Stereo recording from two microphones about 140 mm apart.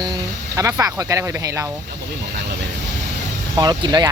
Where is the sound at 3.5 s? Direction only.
30° right (ahead or behind).